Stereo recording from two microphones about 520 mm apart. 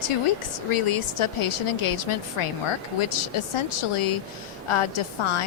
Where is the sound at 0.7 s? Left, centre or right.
Left.